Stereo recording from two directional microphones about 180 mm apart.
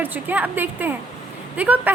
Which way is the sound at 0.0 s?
10° right (ahead or behind).